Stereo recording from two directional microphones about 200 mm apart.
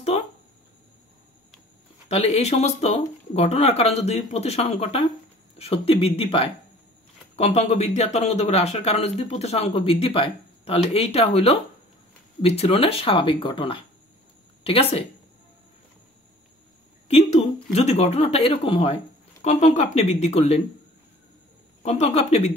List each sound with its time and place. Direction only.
2.0 s speech: 35° left (ahead or behind)
17.7 s speech: 35° left (ahead or behind)
21.8 s speech: 35° left (ahead or behind)